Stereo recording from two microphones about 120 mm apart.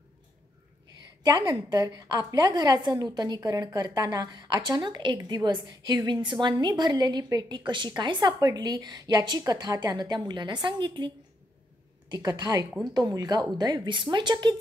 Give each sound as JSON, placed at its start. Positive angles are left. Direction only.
{"t": 1.2, "sound": "a woman's voice", "side_deg": -30}
{"t": 12.1, "sound": "a woman's voice", "side_deg": -30}